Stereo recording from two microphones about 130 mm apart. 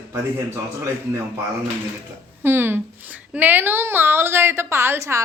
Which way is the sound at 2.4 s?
15° right (ahead or behind).